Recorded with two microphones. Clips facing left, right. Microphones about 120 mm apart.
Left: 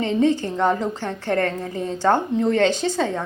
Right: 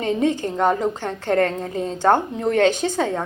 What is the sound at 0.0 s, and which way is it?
Speech, 50° right (ahead or behind).